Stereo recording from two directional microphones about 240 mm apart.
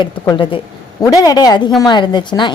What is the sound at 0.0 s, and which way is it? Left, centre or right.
A woman's voice, centre.